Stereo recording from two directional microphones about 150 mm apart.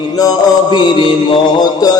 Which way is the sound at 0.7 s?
35° left (ahead or behind).